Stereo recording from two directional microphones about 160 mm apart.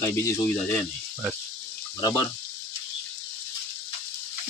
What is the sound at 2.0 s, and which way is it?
Speech, 25° left (ahead or behind).